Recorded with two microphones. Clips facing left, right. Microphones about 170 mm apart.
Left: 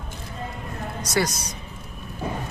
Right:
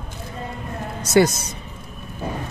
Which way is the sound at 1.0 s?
25° right (ahead or behind).